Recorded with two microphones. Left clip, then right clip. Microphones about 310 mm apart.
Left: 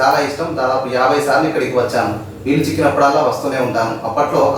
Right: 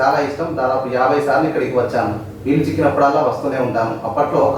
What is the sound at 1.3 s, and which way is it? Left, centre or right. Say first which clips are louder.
Speech: left 1 dB; centre.